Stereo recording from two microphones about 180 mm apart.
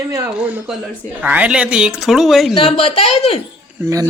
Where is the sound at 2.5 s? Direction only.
30° left (ahead or behind).